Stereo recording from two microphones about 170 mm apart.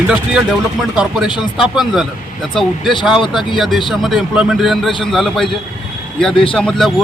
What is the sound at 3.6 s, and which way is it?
Speech, centre (ahead or behind).